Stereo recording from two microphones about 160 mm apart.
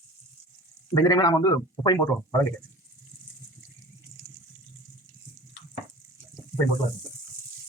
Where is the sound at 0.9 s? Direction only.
25° left (ahead or behind).